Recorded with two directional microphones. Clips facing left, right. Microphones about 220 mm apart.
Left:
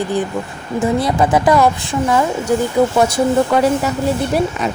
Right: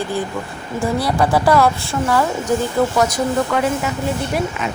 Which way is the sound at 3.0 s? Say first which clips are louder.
Left 4 dB; 30° left (ahead or behind).